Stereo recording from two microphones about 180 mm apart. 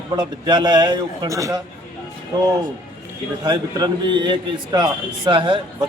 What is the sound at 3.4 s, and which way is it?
A man's voice, 20° right (ahead or behind).